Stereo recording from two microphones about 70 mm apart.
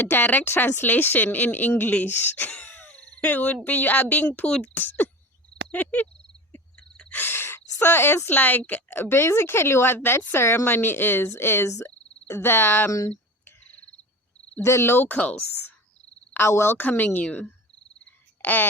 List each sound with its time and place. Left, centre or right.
0.1 s speech: left
2.5 s a sound: centre
2.7 s speech: left
6.7 s a sound: centre
7.2 s speech: left
14.6 s speech: left
15.2 s speech: centre
16.3 s speech: left
18.4 s speech: left